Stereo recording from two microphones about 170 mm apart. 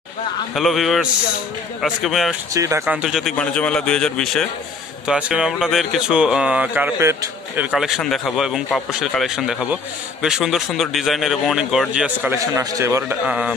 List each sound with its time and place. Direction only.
0.6 s speech: centre (ahead or behind)
2.5 s speech: 20° right (ahead or behind)
3.0 s speech: centre (ahead or behind)
13.3 s speech: 5° right (ahead or behind)